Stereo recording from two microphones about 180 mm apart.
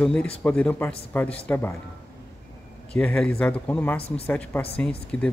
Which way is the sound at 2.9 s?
5° left (ahead or behind).